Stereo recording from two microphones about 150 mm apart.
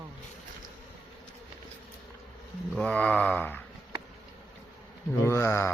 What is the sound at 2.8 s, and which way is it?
Speech, 10° left (ahead or behind).